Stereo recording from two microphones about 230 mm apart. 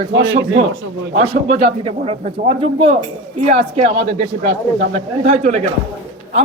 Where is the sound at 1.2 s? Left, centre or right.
Right.